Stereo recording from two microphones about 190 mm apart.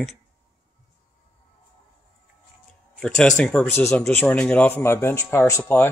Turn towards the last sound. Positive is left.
turn(degrees=10)  # may be behind; listen again after turning